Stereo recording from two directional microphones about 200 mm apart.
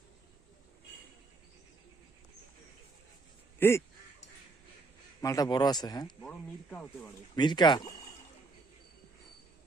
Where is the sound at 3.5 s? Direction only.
10° left (ahead or behind).